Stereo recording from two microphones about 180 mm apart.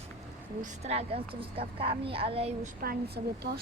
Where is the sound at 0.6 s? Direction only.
35° right (ahead or behind).